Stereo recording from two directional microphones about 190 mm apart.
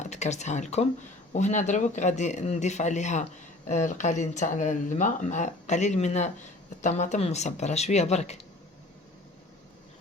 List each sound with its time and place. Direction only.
0.0 s speech: 35° left (ahead or behind)